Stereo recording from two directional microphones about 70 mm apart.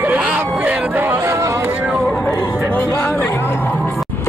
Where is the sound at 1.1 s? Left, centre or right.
Right.